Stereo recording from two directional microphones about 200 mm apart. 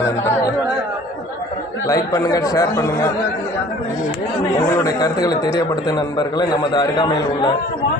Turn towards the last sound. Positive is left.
turn(degrees=20)  # may be behind; listen again after turning